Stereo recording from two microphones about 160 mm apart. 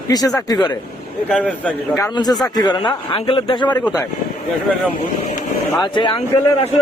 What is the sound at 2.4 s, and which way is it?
Speech, 25° left (ahead or behind).